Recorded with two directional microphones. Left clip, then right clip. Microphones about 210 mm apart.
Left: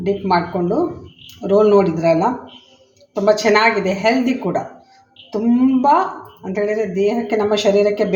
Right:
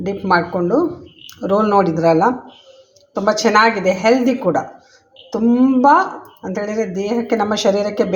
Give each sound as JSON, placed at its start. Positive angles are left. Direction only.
{"t": 0.0, "sound": "speech", "side_deg": -35}